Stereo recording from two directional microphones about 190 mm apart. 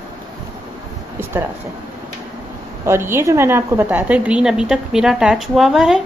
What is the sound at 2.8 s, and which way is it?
A woman's voice, 15° right (ahead or behind).